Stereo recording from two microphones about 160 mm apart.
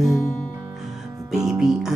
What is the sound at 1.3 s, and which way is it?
Music, 5° right (ahead or behind).